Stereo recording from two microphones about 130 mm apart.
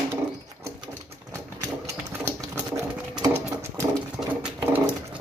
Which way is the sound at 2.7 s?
30° right (ahead or behind).